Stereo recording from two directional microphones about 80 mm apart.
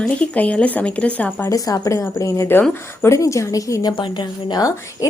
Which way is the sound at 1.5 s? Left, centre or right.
Left.